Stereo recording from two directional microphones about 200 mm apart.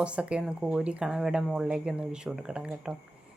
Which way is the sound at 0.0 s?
5° right (ahead or behind).